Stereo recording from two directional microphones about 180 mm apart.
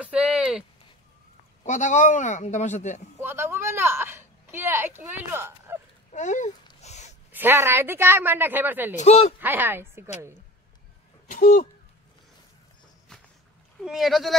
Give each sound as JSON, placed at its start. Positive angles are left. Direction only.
{"t": 0.0, "sound": "a sound", "side_deg": -5}
{"t": 1.6, "sound": "a man's voice", "side_deg": 45}
{"t": 3.2, "sound": "speech", "side_deg": -15}
{"t": 6.1, "sound": "speech", "side_deg": 40}
{"t": 6.8, "sound": "a sound", "side_deg": 40}
{"t": 7.3, "sound": "speech", "side_deg": -15}
{"t": 8.9, "sound": "speech", "side_deg": 35}
{"t": 9.4, "sound": "speech", "side_deg": -10}
{"t": 11.2, "sound": "speech", "side_deg": 50}
{"t": 13.8, "sound": "speech", "side_deg": 0}